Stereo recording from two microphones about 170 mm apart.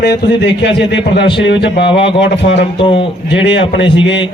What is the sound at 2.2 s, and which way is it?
Speech, 90° left.